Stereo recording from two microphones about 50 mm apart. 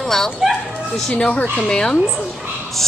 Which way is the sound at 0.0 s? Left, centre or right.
Centre.